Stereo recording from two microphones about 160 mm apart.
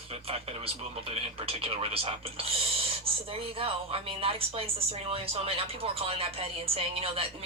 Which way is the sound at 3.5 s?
35° right (ahead or behind).